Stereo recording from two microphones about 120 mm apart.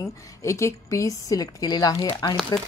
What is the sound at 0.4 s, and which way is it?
Speech, 25° left (ahead or behind).